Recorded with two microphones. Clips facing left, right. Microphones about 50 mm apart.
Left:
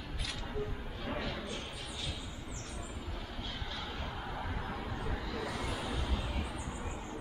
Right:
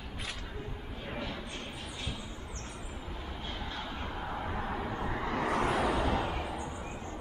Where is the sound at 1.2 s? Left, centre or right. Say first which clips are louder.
Even; right.